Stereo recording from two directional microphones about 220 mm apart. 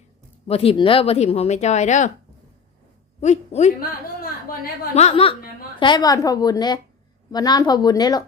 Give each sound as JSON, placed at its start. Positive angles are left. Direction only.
{"t": 0.4, "sound": "speech", "side_deg": 25}
{"t": 3.2, "sound": "a woman's voice", "side_deg": 30}
{"t": 4.9, "sound": "a woman's voice", "side_deg": 25}